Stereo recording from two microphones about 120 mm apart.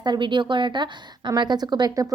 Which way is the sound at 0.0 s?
40° right (ahead or behind).